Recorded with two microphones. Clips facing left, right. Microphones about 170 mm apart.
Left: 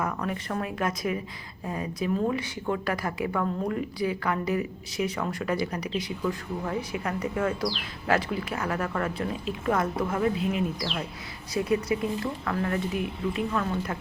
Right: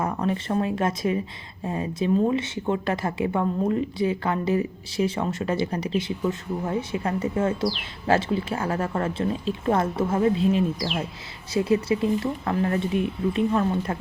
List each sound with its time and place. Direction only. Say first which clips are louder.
0.0 s speech: right 5 dB; 30° right (ahead or behind)